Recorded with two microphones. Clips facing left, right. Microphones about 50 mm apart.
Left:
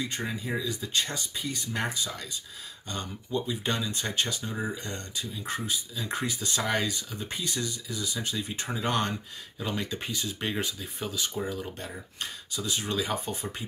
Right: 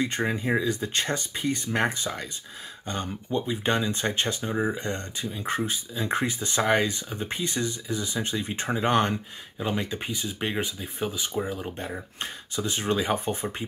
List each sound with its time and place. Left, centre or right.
0.0 s speech: right